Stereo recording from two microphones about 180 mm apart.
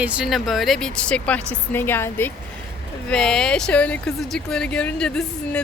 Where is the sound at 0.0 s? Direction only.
5° right (ahead or behind).